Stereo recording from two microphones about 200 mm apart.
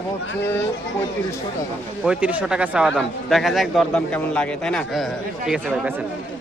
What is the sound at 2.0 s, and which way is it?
A man's voice, 5° right (ahead or behind).